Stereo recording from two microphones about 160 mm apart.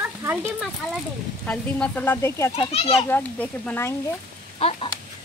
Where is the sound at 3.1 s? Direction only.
10° left (ahead or behind).